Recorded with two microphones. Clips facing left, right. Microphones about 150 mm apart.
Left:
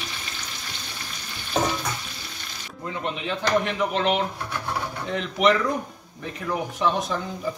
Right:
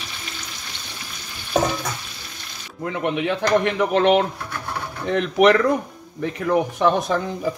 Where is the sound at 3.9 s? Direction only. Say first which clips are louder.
Right 9 dB; 55° right (ahead or behind).